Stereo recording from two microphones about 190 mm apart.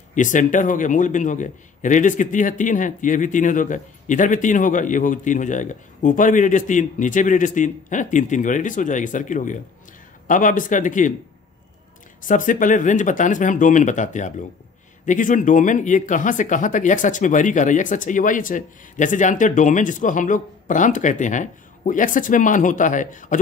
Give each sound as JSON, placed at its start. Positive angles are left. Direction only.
{"t": 0.1, "sound": "a man's voice", "side_deg": 40}
{"t": 12.3, "sound": "speech", "side_deg": 45}